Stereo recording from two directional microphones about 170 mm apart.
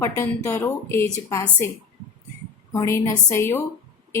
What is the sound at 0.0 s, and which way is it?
Speech, 15° left (ahead or behind).